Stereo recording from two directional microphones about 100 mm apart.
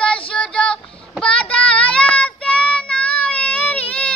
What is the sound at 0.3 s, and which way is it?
Child singing, 10° left (ahead or behind).